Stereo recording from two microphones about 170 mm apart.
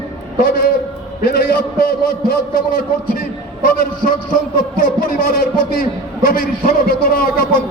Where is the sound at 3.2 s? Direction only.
55° left (ahead or behind).